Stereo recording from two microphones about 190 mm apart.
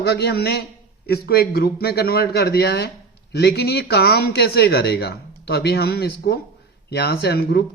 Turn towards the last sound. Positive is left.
turn(degrees=60)  # may be behind; listen again after turning